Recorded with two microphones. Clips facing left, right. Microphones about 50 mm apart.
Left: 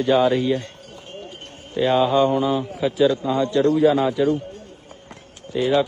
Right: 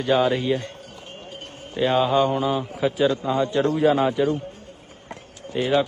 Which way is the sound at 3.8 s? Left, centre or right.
Right.